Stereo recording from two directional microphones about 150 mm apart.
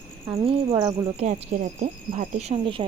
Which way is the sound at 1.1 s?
50° right (ahead or behind).